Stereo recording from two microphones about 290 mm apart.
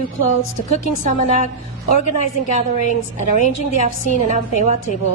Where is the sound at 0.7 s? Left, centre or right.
Left.